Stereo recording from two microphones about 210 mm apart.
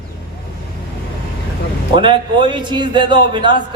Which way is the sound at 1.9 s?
20° right (ahead or behind).